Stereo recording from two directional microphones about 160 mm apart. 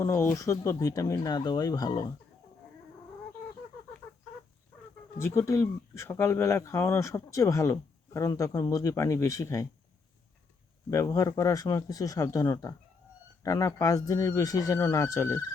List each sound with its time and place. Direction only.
0.0 s speech: 15° left (ahead or behind)
5.1 s speech: 15° left (ahead or behind)
10.9 s speech: 20° left (ahead or behind)